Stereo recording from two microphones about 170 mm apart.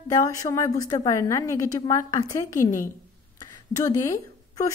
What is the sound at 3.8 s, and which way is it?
Speech, 20° left (ahead or behind).